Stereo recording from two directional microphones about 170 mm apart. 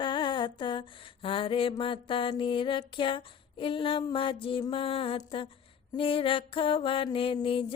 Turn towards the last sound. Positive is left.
turn(degrees=30)  # may be behind; listen again after turning